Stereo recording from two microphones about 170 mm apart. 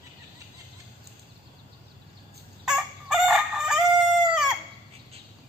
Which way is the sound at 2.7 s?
5° right (ahead or behind).